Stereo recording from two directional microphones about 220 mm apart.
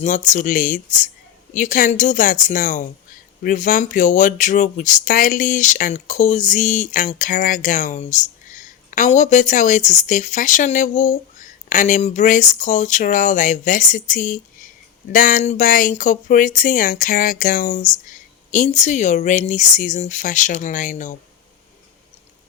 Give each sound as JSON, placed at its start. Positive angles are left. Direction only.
{"t": 0.0, "sound": "speech", "side_deg": 35}